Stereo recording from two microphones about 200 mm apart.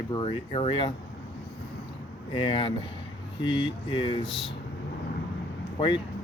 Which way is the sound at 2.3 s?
25° left (ahead or behind).